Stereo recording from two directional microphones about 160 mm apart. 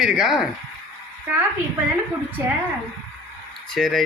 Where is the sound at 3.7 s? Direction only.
Centre (ahead or behind).